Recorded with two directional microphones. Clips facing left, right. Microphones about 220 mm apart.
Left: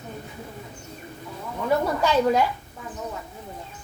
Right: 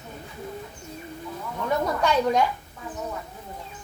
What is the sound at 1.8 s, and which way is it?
Speech, 5° left (ahead or behind).